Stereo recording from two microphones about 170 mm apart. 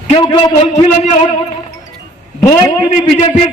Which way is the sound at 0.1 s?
30° left (ahead or behind).